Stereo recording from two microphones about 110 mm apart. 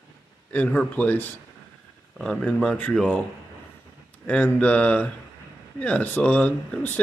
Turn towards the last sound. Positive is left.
turn(degrees=15)  # may be behind; listen again after turning